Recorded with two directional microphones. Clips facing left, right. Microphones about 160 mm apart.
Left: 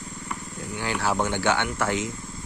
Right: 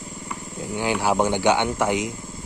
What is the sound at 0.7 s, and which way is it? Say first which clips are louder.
Speech: right 5 dB; 15° right (ahead or behind).